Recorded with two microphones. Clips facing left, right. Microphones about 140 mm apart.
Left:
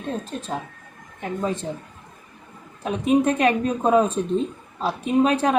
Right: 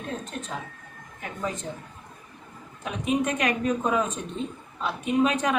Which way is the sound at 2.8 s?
35° left (ahead or behind).